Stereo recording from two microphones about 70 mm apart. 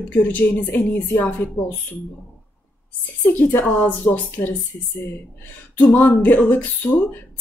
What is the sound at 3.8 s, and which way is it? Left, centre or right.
Speech, left.